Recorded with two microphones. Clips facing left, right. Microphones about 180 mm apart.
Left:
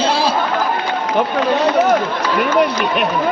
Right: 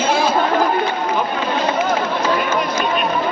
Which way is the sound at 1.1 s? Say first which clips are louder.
Left 4 dB; 70° left (ahead or behind).